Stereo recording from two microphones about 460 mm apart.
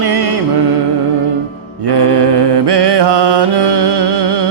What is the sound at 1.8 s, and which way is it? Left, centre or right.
Music, right.